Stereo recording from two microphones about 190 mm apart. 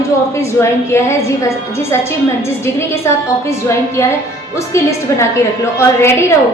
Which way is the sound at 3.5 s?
15° left (ahead or behind).